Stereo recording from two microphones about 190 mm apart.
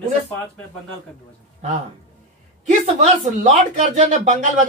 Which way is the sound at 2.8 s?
35° right (ahead or behind).